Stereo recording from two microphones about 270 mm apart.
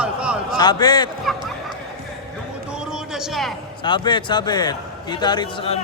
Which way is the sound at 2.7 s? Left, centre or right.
Centre.